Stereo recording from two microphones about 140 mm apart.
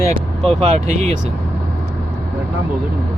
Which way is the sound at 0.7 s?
55° right (ahead or behind).